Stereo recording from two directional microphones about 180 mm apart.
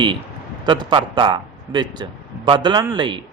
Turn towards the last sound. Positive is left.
turn(degrees=-25)  # may be behind; listen again after turning